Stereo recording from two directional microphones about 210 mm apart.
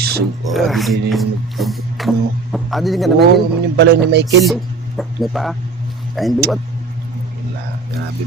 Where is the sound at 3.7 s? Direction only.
55° right (ahead or behind).